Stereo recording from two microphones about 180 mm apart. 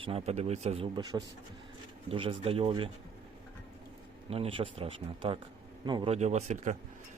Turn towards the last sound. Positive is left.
turn(degrees=-40)  # may be behind; listen again after turning